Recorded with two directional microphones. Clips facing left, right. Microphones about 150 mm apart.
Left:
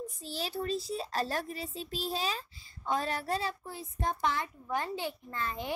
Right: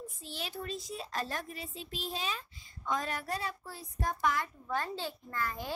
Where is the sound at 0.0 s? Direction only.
35° left (ahead or behind).